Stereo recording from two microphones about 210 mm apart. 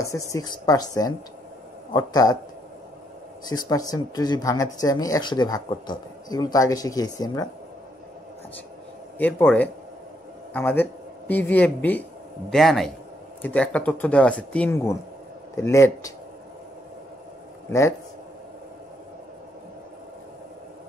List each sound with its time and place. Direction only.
0.3 s speech: 15° left (ahead or behind)
3.4 s speech: 20° left (ahead or behind)
9.2 s a man's voice: 10° left (ahead or behind)
17.6 s a man's voice: 15° left (ahead or behind)